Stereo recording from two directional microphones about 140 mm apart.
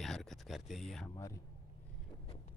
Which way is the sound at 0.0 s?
Centre (ahead or behind).